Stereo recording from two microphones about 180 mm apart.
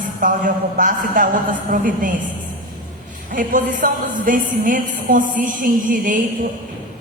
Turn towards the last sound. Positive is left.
turn(degrees=-45)  # may be behind; listen again after turning